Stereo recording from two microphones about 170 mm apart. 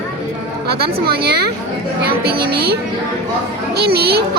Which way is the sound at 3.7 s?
70° right (ahead or behind).